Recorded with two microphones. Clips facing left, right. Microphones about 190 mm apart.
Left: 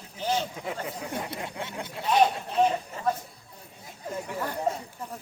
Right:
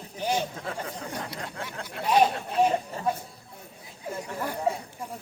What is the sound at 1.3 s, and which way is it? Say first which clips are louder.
Speech: left 2 dB; 25° left (ahead or behind).